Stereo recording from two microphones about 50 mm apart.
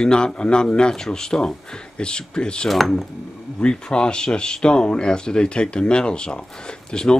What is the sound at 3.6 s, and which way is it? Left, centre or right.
Speech, centre.